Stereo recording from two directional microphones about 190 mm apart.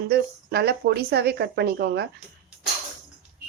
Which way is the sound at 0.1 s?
55° right (ahead or behind).